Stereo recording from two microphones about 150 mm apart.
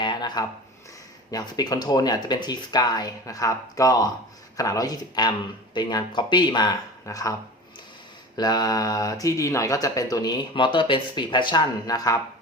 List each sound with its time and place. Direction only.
0.0 s a sound: 30° left (ahead or behind)
1.3 s speech: 25° left (ahead or behind)
8.4 s speech: 25° left (ahead or behind)